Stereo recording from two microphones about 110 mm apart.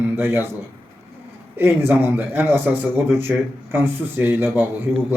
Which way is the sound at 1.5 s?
20° right (ahead or behind).